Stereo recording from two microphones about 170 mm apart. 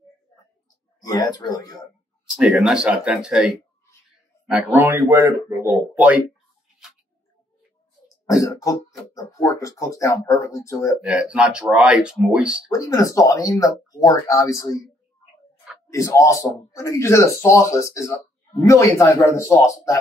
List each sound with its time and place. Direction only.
1.0 s speech: 20° left (ahead or behind)
2.3 s speech: 5° right (ahead or behind)
4.7 s speech: 10° right (ahead or behind)
8.3 s speech: 20° left (ahead or behind)
11.0 s speech: 5° right (ahead or behind)
12.6 s speech: 20° left (ahead or behind)
15.9 s speech: 15° left (ahead or behind)